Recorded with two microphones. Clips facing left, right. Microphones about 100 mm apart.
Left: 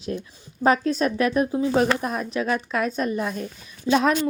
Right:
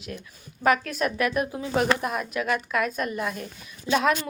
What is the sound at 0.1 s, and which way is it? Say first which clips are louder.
A woman's voice: left 7 dB; 30° left (ahead or behind).